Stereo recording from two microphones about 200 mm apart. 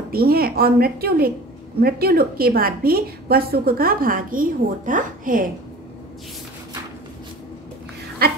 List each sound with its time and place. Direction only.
0.1 s a woman's voice: 50° right (ahead or behind)